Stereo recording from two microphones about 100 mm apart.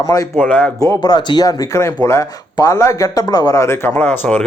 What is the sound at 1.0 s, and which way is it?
Speech, 40° left (ahead or behind).